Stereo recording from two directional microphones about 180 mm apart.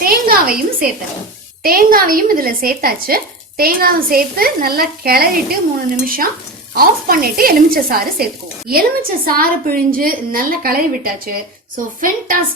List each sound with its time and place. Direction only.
0.0 s a sound: 55° right (ahead or behind)
1.6 s a woman's voice: 55° right (ahead or behind)
6.7 s a woman's voice: 55° right (ahead or behind)